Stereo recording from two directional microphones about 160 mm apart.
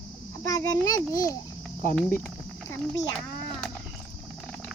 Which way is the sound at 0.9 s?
20° left (ahead or behind).